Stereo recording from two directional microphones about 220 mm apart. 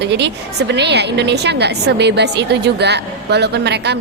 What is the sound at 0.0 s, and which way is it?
A woman's voice, 50° right (ahead or behind).